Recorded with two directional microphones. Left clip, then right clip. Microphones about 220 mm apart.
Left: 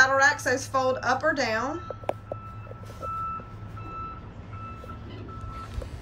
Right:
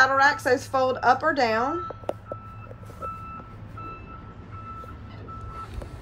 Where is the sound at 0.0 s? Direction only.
Centre (ahead or behind).